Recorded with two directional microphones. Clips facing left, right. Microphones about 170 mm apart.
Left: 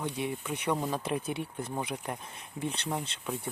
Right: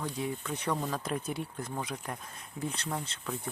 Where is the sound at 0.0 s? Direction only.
20° left (ahead or behind).